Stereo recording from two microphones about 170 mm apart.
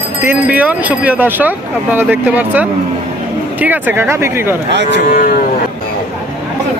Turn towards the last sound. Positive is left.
turn(degrees=55)  # may be behind; listen again after turning